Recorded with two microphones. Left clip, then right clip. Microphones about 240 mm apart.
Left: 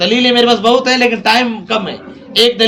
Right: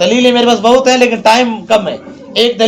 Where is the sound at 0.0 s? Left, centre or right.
Left.